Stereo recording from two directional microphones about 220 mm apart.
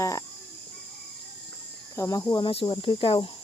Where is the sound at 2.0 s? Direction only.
15° left (ahead or behind).